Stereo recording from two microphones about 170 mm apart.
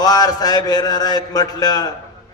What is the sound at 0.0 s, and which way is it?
A man's voice, 20° left (ahead or behind).